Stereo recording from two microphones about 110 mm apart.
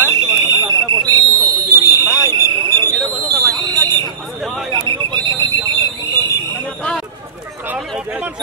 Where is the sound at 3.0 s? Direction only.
Centre (ahead or behind).